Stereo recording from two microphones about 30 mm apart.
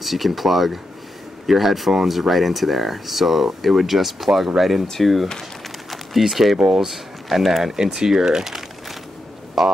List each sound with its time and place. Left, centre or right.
0.0 s speech: centre
6.2 s speech: centre
6.6 s speech: right
6.9 s speech: centre
7.7 s speech: centre
9.6 s speech: centre